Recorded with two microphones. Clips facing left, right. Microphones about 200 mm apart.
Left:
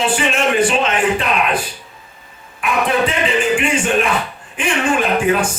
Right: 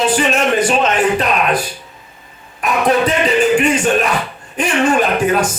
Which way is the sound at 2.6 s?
40° right (ahead or behind).